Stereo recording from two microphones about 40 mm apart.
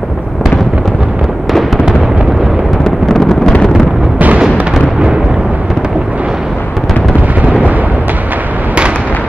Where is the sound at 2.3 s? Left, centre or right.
Centre.